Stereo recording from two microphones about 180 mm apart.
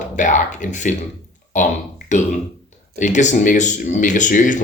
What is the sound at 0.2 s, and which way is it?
Speech, 45° left (ahead or behind).